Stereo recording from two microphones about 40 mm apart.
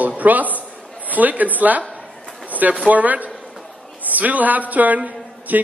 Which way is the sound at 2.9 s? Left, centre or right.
Right.